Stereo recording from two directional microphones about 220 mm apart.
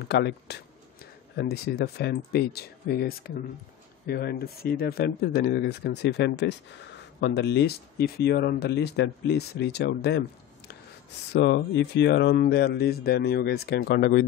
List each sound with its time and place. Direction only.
0.1 s speech: 50° left (ahead or behind)
11.3 s speech: 50° left (ahead or behind)